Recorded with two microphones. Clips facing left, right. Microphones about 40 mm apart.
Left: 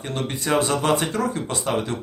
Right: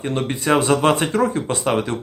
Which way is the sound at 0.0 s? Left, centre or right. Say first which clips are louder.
Right 5 dB; right.